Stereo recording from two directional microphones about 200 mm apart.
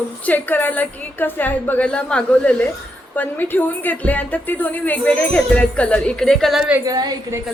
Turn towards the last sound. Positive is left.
turn(degrees=-20)  # may be behind; listen again after turning